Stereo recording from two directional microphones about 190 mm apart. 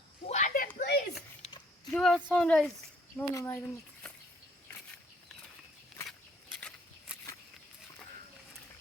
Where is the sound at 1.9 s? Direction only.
Centre (ahead or behind).